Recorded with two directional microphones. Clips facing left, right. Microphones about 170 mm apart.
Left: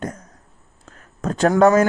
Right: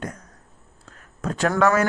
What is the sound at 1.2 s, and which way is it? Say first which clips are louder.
Speech: left 5 dB; 45° left (ahead or behind).